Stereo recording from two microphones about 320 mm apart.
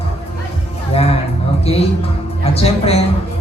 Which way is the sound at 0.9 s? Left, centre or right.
Centre.